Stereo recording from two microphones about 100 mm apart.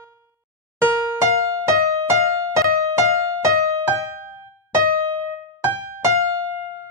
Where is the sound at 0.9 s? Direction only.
30° right (ahead or behind).